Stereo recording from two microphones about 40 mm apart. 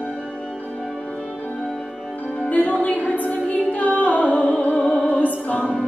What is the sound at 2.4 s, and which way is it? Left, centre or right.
Music, left.